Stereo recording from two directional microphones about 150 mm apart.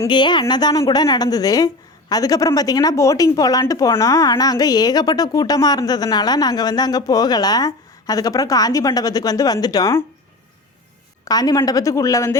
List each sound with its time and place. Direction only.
0.0 s a woman's voice: 30° left (ahead or behind)
11.3 s a woman's voice: 25° left (ahead or behind)